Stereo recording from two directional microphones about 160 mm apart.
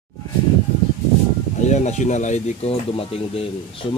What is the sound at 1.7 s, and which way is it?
Speech, 45° left (ahead or behind).